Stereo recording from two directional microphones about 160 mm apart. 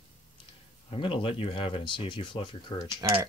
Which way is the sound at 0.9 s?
35° left (ahead or behind).